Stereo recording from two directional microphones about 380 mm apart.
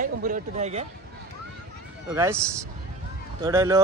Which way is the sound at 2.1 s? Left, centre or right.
Centre.